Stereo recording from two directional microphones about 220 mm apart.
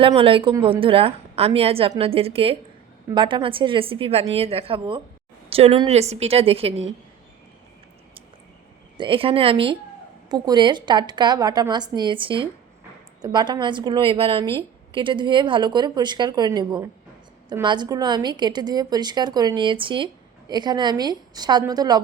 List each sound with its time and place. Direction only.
0.0 s a woman's voice: 25° right (ahead or behind)
9.0 s a woman's voice: 25° right (ahead or behind)